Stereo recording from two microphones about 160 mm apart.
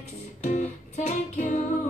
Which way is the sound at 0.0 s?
45° left (ahead or behind).